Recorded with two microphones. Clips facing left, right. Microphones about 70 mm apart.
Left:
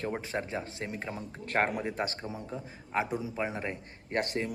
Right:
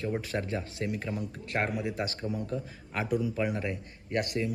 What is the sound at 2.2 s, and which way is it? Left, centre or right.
A man's voice, left.